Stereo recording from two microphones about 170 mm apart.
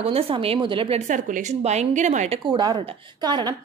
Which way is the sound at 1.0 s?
50° right (ahead or behind).